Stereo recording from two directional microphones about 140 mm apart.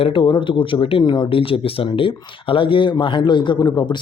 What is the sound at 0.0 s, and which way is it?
Speech, 40° left (ahead or behind).